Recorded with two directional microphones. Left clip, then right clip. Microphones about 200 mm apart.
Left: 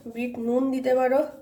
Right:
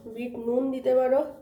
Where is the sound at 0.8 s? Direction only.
40° left (ahead or behind).